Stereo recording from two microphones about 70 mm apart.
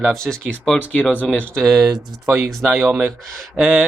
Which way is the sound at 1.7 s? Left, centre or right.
Centre.